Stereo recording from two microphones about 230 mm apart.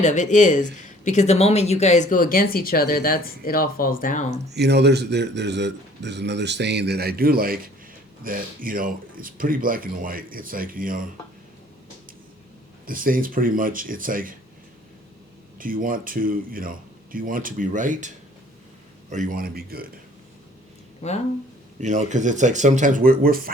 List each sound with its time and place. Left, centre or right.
0.0 s speech: left
4.5 s a man's voice: right
12.8 s speech: right
15.5 s speech: right
19.1 s speech: right
21.0 s speech: left
21.8 s speech: right